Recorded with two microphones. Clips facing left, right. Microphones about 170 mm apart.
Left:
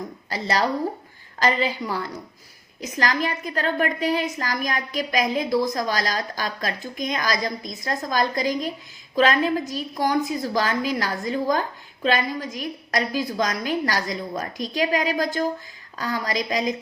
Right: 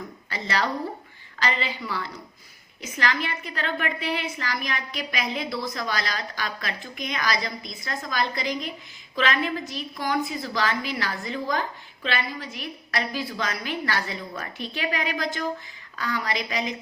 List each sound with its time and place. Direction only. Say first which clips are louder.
0.3 s a woman's voice: left 4 dB; 40° left (ahead or behind)